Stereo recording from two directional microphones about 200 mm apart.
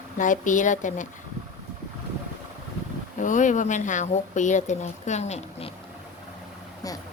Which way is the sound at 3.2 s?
40° left (ahead or behind).